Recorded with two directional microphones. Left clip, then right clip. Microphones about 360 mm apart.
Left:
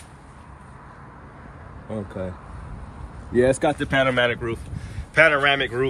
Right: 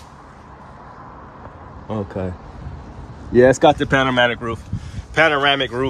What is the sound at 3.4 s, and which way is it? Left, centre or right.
Speech, right.